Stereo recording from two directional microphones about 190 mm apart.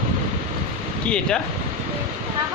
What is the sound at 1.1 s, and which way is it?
Speech, 5° left (ahead or behind).